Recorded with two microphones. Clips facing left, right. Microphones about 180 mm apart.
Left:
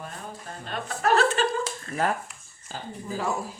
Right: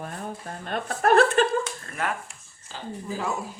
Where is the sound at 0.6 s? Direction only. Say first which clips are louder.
Right 3 dB; 55° right (ahead or behind).